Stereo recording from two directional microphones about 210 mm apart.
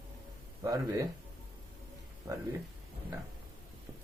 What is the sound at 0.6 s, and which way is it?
Speech, 15° right (ahead or behind).